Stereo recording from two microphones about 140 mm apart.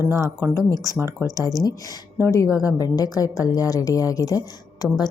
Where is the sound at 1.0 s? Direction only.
20° right (ahead or behind).